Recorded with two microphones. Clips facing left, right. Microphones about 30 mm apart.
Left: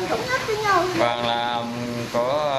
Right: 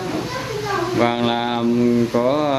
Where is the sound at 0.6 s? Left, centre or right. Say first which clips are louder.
Left 1 dB; left.